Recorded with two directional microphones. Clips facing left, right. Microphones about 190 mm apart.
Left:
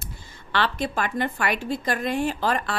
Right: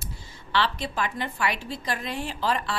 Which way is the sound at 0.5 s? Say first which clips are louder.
Left 2 dB; 50° left (ahead or behind).